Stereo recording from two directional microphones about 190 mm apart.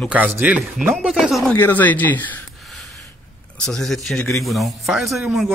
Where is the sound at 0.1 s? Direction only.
5° right (ahead or behind).